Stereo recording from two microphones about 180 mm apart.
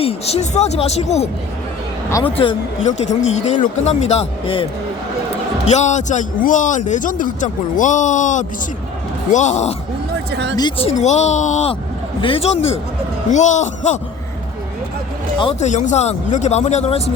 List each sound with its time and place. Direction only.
0.0 s speech: 35° left (ahead or behind)
2.4 s speech: 35° left (ahead or behind)
5.6 s a man's voice: 40° left (ahead or behind)
10.3 s speech: 75° right (ahead or behind)
10.6 s speech: 30° left (ahead or behind)
15.4 s speech: 30° left (ahead or behind)
15.7 s speech: 40° left (ahead or behind)